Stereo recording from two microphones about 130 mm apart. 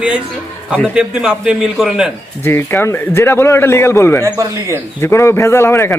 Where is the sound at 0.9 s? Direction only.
5° right (ahead or behind).